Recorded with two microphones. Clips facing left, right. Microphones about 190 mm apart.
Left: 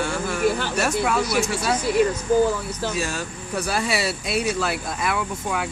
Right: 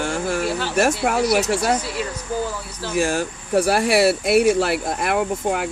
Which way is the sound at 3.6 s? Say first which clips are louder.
Right 7 dB; 70° right (ahead or behind).